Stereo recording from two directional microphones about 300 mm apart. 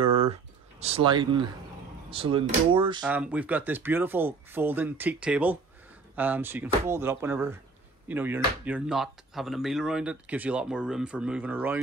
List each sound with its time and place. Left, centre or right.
0.0 s a sound: centre
2.0 s speech: centre
3.1 s speech: centre